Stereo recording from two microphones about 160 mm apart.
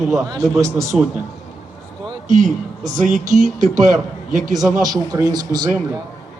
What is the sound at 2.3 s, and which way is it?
Speech, 50° right (ahead or behind).